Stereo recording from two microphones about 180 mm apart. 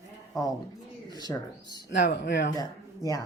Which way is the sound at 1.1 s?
25° left (ahead or behind).